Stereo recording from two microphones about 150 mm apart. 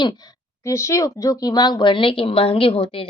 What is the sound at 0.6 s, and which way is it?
Speech, 20° left (ahead or behind).